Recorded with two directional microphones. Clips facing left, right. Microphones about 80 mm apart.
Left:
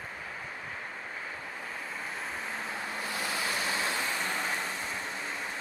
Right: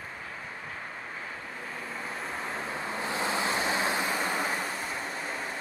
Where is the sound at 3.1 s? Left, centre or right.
Right.